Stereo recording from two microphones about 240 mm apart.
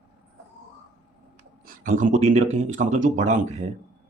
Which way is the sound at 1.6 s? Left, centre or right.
Right.